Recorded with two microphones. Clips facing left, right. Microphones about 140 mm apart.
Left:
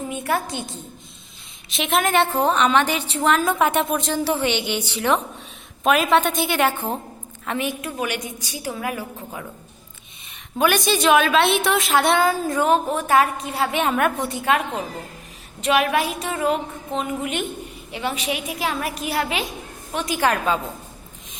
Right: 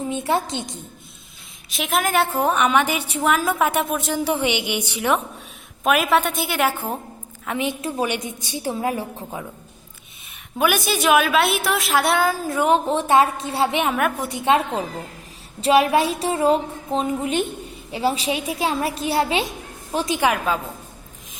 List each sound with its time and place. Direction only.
0.1 s a woman's voice: 25° right (ahead or behind)
1.7 s a woman's voice: centre (ahead or behind)
7.7 s a woman's voice: 30° right (ahead or behind)
10.6 s a woman's voice: 5° right (ahead or behind)
12.6 s a woman's voice: 25° right (ahead or behind)
13.8 s a woman's voice: 5° right (ahead or behind)
14.3 s a woman's voice: 25° right (ahead or behind)
20.1 s a woman's voice: 15° right (ahead or behind)